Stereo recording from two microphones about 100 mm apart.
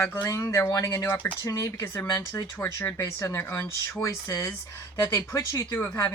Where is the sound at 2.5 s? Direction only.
25° left (ahead or behind).